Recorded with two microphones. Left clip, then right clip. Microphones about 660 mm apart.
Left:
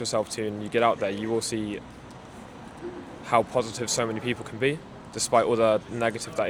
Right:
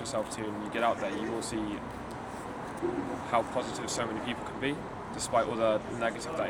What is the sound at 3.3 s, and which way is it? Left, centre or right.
Speech, left.